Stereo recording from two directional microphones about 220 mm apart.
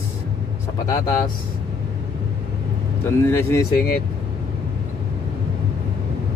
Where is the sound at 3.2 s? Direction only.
10° left (ahead or behind).